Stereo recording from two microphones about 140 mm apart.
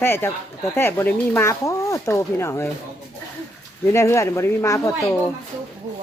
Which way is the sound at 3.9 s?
20° left (ahead or behind).